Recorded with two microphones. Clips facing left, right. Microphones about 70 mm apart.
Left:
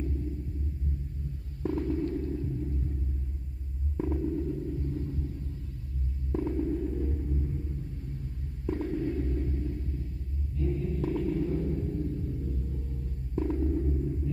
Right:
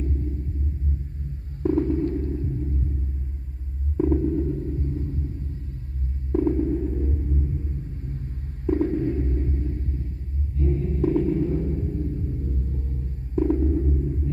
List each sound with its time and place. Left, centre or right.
1.6 s stomach rumble: right
4.0 s sonar: right
6.5 s sonar: right
8.6 s stomach rumble: right
10.6 s rumble: right
13.4 s music: right